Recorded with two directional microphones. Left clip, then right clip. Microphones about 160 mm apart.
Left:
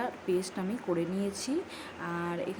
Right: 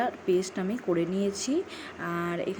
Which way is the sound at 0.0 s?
15° right (ahead or behind).